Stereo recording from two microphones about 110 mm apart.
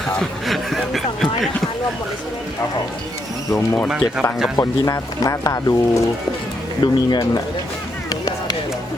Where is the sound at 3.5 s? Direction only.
20° left (ahead or behind).